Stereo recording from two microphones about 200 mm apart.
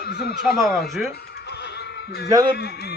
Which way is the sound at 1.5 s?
55° left (ahead or behind).